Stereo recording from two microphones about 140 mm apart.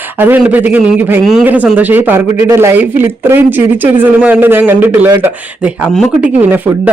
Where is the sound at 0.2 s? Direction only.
10° right (ahead or behind).